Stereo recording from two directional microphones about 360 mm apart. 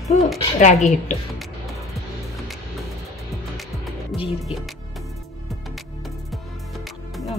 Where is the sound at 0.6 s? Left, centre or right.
Centre.